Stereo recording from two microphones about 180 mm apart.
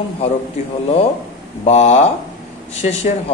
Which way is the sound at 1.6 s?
40° left (ahead or behind).